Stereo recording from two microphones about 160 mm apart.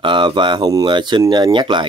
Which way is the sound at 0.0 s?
30° right (ahead or behind).